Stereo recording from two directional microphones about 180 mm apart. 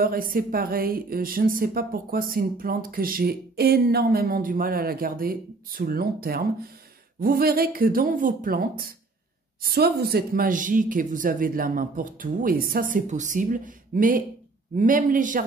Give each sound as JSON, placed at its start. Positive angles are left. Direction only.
{"t": 0.0, "sound": "speech", "side_deg": -55}